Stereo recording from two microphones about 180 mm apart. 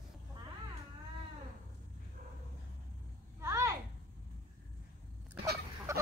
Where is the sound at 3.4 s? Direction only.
15° right (ahead or behind).